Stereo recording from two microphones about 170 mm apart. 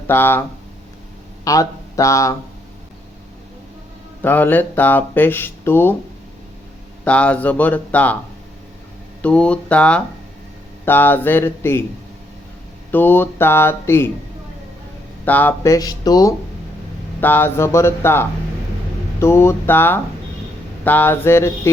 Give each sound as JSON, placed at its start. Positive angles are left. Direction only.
{"t": 0.1, "sound": "speech", "side_deg": 15}
{"t": 1.5, "sound": "speech", "side_deg": 20}
{"t": 4.2, "sound": "speech", "side_deg": 10}
{"t": 7.0, "sound": "speech", "side_deg": 10}
{"t": 9.2, "sound": "speech", "side_deg": 5}
{"t": 12.9, "sound": "speech", "side_deg": 10}
{"t": 15.2, "sound": "speech", "side_deg": 10}
{"t": 17.2, "sound": "speech", "side_deg": 10}